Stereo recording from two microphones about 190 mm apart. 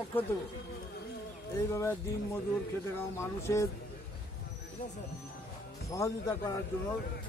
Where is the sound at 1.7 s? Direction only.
15° left (ahead or behind).